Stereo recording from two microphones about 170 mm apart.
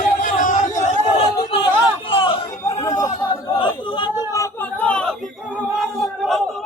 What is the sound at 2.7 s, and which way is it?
Chatter, 20° left (ahead or behind).